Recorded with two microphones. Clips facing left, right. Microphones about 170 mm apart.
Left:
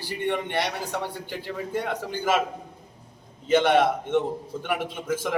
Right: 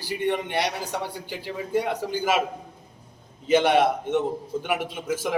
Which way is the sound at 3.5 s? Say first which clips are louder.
Even; 10° right (ahead or behind).